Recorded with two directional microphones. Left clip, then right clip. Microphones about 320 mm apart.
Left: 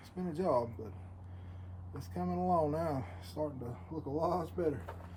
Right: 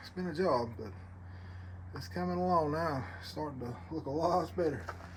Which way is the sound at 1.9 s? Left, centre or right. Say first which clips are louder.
Right 2 dB; centre.